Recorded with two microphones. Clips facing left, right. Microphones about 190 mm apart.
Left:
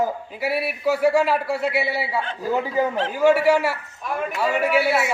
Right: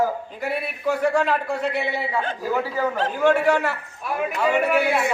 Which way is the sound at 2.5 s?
20° left (ahead or behind).